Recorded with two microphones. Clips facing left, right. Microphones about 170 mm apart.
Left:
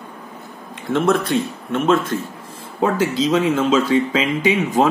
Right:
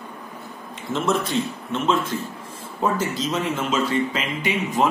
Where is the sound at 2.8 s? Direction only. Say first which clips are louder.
Left 5 dB; 90° left.